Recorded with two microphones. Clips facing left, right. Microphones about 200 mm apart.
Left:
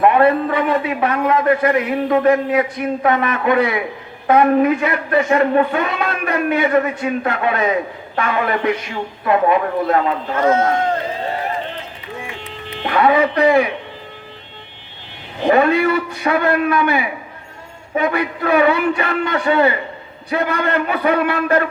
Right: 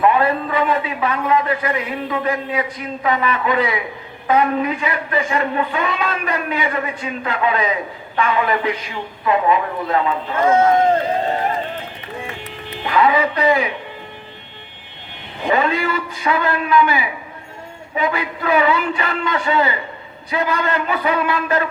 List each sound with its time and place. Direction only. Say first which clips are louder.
0.0 s a man's voice: left 3 dB; 55° left (ahead or behind)
12.8 s a man's voice: left 2 dB; 50° left (ahead or behind)
15.5 s a man's voice: left 4 dB; 55° left (ahead or behind)